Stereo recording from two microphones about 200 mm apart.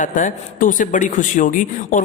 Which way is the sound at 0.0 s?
40° left (ahead or behind).